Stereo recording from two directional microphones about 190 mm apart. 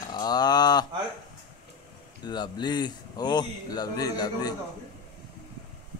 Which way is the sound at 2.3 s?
20° left (ahead or behind).